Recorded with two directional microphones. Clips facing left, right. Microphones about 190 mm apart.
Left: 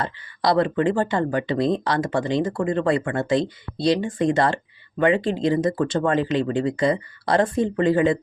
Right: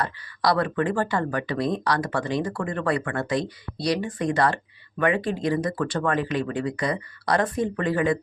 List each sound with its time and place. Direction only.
0.0 s speech: 25° left (ahead or behind)